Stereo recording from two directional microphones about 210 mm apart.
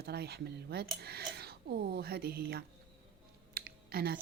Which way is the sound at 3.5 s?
45° right (ahead or behind).